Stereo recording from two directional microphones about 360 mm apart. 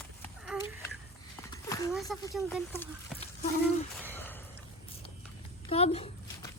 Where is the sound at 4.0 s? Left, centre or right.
Centre.